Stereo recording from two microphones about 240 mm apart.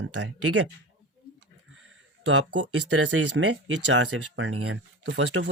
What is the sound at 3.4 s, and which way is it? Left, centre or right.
Speech, right.